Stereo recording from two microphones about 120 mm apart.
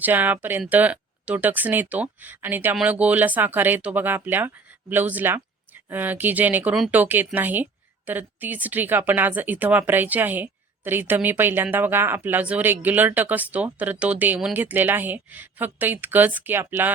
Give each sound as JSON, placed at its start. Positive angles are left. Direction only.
{"t": 0.0, "sound": "a woman's voice", "side_deg": -15}